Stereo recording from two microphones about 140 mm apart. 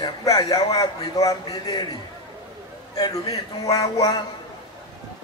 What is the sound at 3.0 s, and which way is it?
A man's voice, 25° left (ahead or behind).